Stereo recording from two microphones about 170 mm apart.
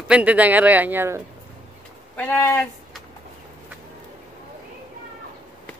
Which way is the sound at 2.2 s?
10° left (ahead or behind).